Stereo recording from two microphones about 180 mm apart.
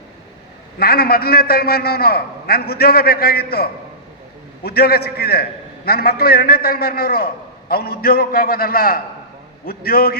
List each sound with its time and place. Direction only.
0.8 s a man's voice: 60° left (ahead or behind)